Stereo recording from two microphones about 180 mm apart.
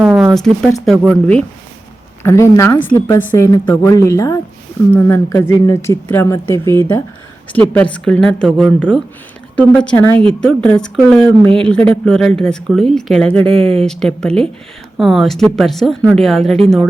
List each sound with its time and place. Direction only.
0.0 s a sound: 5° right (ahead or behind)
0.3 s speech: 5° left (ahead or behind)
2.2 s a woman's voice: 15° left (ahead or behind)